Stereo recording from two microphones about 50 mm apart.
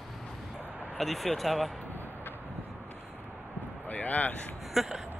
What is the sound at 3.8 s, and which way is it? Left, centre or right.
Speech, left.